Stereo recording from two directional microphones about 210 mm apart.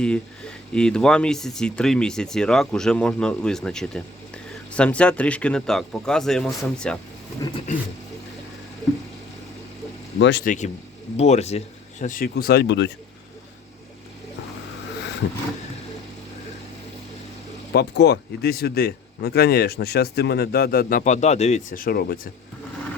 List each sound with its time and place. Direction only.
0.0 s speech: 5° left (ahead or behind)
10.2 s speech: 60° left (ahead or behind)
10.4 s speech: 35° left (ahead or behind); by 12.9 s 55° left (ahead or behind)
17.7 s speech: 55° left (ahead or behind)